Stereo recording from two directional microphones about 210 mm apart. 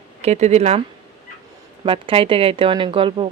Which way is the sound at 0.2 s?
30° right (ahead or behind).